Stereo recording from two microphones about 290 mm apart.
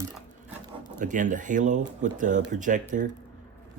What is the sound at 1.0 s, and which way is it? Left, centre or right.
Speech, right.